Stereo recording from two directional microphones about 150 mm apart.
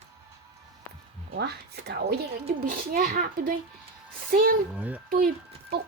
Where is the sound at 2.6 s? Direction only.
75° right (ahead or behind).